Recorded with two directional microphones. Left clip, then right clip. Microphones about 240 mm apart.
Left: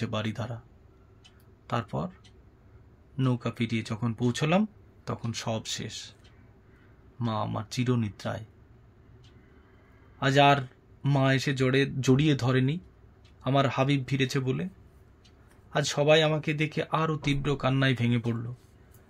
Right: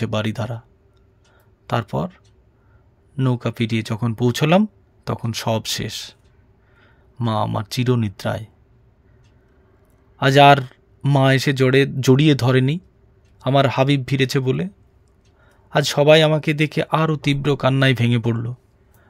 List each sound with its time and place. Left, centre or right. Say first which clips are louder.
0.0 s speech: right 9 dB; right
1.7 s speech: right 9 dB; right
7.2 s speech: right 10 dB; right
10.1 s speech: right 10 dB; right
15.7 s speech: right 9 dB; right